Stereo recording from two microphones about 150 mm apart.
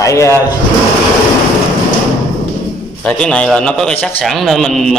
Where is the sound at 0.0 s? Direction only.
20° left (ahead or behind).